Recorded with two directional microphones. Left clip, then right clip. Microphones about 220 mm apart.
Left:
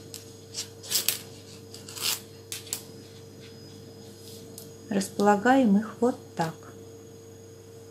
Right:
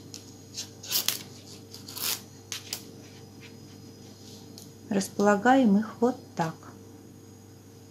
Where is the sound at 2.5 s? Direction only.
20° right (ahead or behind).